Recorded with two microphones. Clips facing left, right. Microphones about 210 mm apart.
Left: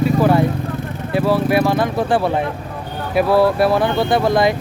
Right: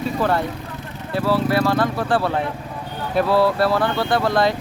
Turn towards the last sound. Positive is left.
turn(degrees=15)  # may be behind; listen again after turning